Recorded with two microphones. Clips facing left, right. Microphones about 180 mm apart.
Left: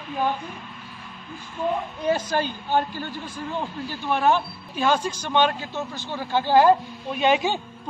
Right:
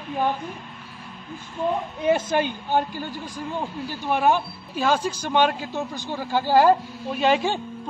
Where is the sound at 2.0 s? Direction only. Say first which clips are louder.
Right 3 dB; 25° right (ahead or behind).